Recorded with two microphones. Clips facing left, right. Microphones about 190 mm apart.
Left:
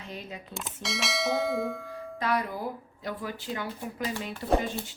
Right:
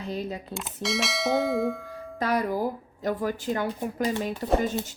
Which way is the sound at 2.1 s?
40° right (ahead or behind).